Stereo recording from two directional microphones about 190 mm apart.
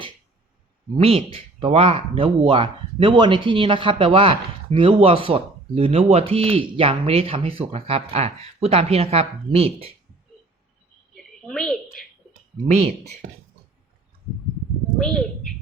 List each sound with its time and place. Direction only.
0.9 s speech: 30° right (ahead or behind)
11.1 s a sound: 5° left (ahead or behind)
14.9 s speech: centre (ahead or behind)